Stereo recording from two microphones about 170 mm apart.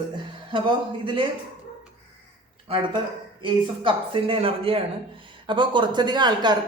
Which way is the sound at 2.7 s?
35° right (ahead or behind).